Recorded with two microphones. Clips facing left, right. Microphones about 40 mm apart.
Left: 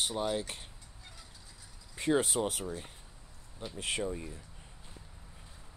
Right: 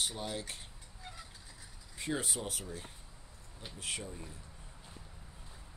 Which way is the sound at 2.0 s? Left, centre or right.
Left.